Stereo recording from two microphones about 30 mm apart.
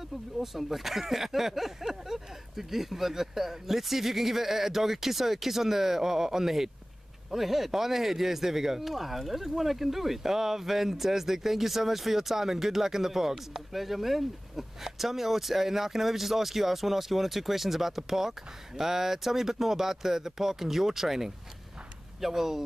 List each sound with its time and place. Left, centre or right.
0.4 s speech: centre